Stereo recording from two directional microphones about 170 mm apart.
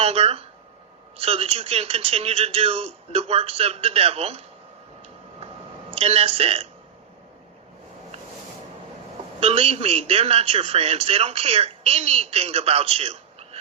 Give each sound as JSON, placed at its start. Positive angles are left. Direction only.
{"t": 0.0, "sound": "a man's voice", "side_deg": -35}
{"t": 5.9, "sound": "a man's voice", "side_deg": -35}
{"t": 9.4, "sound": "a man's voice", "side_deg": -35}